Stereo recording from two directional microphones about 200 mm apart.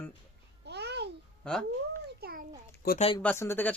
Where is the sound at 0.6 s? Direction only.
55° right (ahead or behind).